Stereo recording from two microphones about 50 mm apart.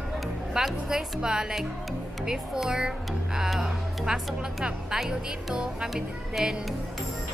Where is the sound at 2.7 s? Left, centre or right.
Centre.